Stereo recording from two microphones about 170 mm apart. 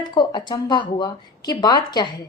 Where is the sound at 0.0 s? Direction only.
25° left (ahead or behind).